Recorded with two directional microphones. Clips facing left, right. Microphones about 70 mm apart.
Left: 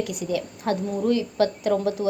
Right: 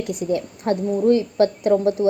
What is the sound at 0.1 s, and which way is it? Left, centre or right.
A woman's voice, right.